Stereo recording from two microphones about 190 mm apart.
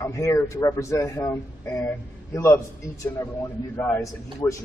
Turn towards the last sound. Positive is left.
turn(degrees=15)  # may be behind; listen again after turning